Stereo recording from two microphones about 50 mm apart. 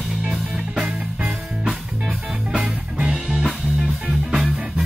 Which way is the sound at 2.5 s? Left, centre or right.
Right.